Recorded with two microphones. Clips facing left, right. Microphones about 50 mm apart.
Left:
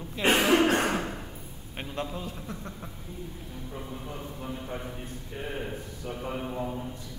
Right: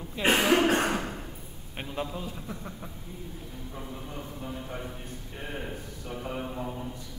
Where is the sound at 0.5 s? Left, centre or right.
Centre.